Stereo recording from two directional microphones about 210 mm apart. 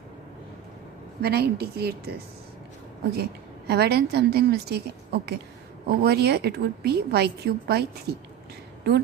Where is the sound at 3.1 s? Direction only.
50° right (ahead or behind).